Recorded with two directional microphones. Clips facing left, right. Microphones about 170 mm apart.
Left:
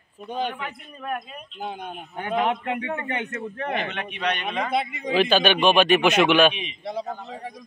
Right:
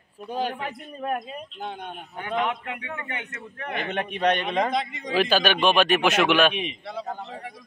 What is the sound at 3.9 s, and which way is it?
Speech, 45° right (ahead or behind).